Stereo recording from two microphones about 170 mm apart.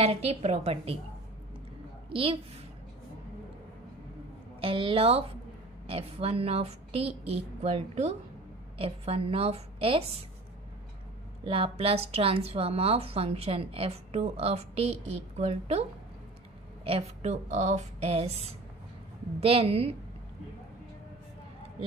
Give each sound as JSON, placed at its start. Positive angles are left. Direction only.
{"t": 0.0, "sound": "a woman's voice", "side_deg": -35}
{"t": 4.6, "sound": "a woman's voice", "side_deg": -30}
{"t": 11.4, "sound": "a woman's voice", "side_deg": -30}
{"t": 16.8, "sound": "a woman's voice", "side_deg": -35}